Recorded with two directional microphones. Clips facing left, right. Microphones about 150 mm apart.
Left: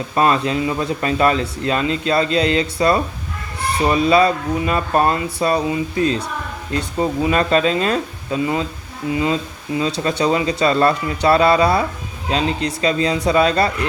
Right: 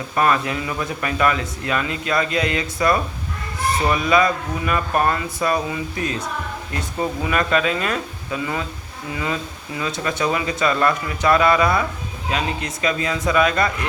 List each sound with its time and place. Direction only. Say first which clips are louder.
0.2 s speech: left 3 dB; 25° left (ahead or behind)
6.7 s speech: left 5 dB; 25° left (ahead or behind)